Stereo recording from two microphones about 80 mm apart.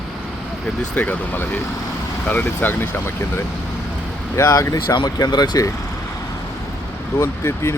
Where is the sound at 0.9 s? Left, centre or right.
Left.